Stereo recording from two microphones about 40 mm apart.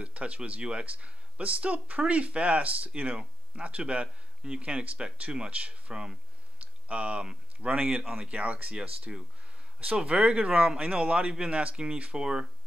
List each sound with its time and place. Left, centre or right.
0.0 s speech: right
6.6 s a sound: right
7.2 s speech: right
8.0 s speech: centre
8.3 s speech: right
9.1 s speech: centre
10.5 s speech: centre
10.8 s speech: right